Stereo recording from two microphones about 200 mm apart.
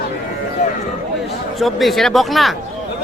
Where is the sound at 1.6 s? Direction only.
Centre (ahead or behind).